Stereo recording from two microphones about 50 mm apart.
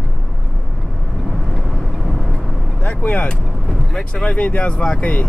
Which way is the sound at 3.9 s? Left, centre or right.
Centre.